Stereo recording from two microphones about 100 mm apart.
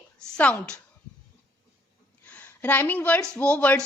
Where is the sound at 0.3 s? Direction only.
10° left (ahead or behind).